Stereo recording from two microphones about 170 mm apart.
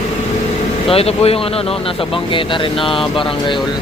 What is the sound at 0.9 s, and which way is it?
Speech, 35° left (ahead or behind).